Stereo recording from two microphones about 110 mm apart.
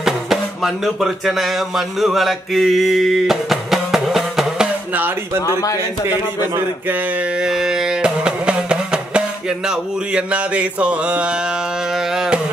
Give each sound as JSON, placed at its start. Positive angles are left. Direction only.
{"t": 0.0, "sound": "music", "side_deg": -5}
{"t": 4.9, "sound": "speech", "side_deg": -15}
{"t": 5.4, "sound": "speech", "side_deg": 30}
{"t": 6.0, "sound": "speech", "side_deg": -20}